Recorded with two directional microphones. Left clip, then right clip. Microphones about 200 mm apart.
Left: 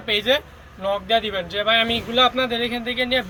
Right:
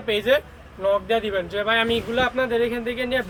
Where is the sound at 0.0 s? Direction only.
20° right (ahead or behind).